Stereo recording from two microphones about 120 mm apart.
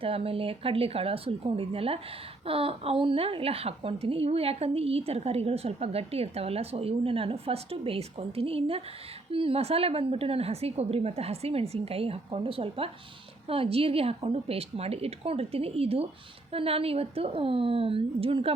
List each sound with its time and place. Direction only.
0.0 s a woman's voice: 50° right (ahead or behind)